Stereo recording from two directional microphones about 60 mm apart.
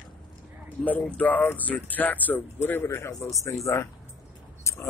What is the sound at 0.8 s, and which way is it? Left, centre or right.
Speech, left.